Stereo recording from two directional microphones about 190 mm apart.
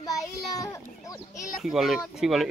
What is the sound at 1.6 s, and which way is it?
Speech, centre (ahead or behind).